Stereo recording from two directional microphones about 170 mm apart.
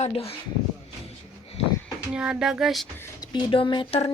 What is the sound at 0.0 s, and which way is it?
Speech, 35° left (ahead or behind).